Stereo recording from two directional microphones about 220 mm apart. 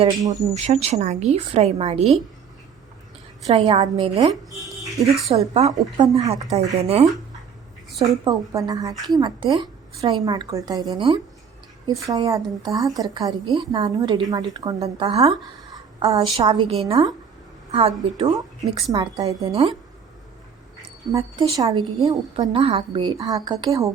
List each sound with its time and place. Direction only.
0.3 s a woman's voice: 30° right (ahead or behind)
3.4 s a woman's voice: 30° right (ahead or behind)
4.8 s a sound: centre (ahead or behind)
5.3 s a woman's voice: 30° right (ahead or behind)
8.2 s a woman's voice: 15° right (ahead or behind)
19.5 s a woman's voice: 25° right (ahead or behind)
21.1 s a woman's voice: 20° right (ahead or behind)